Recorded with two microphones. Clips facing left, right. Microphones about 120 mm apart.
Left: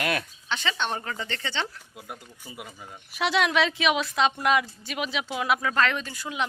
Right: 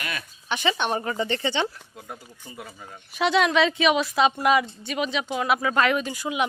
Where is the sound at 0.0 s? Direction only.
75° left (ahead or behind).